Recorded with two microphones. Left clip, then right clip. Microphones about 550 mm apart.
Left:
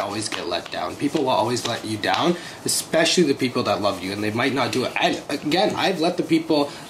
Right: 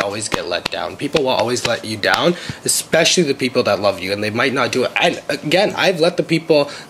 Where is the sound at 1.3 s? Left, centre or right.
Right.